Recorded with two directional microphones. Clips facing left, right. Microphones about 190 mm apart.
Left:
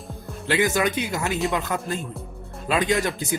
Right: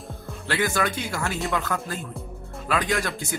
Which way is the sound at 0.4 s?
20° left (ahead or behind).